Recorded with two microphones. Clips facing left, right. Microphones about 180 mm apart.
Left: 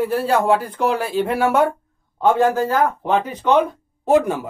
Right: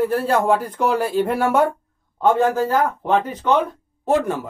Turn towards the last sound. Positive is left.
turn(degrees=10)  # may be behind; listen again after turning